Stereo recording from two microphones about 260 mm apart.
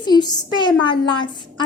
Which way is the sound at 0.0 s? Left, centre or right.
Centre.